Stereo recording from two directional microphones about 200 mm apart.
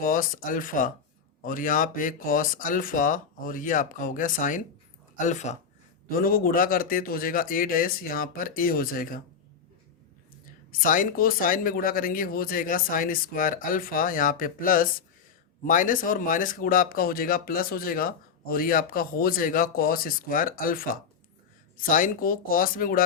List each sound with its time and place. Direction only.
0.0 s speech: 45° left (ahead or behind)
10.7 s speech: 45° left (ahead or behind)